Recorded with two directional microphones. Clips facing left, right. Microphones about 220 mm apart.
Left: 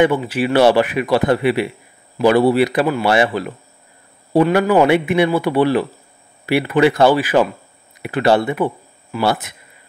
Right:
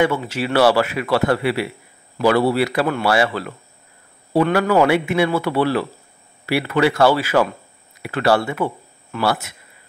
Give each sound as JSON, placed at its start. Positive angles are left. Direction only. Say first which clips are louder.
{"t": 0.3, "sound": "a man's voice", "louder": "left 3 dB", "side_deg": 15}